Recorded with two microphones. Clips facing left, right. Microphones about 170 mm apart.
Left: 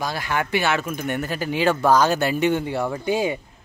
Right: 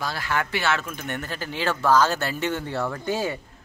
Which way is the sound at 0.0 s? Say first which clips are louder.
Left 2 dB; 15° left (ahead or behind).